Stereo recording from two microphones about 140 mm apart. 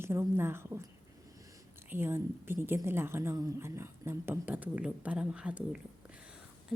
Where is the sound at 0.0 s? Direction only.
15° right (ahead or behind).